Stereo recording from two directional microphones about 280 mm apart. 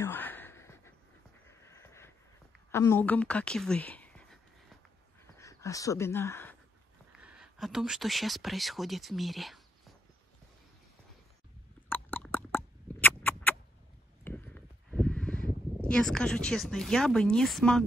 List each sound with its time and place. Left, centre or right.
0.0 s a sound: centre
2.7 s speech: centre
5.4 s speech: centre
7.1 s speech: centre
11.9 s rodents: centre
14.2 s a sound: centre